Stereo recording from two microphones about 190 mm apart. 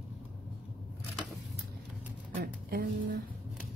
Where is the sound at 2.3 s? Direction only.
50° right (ahead or behind).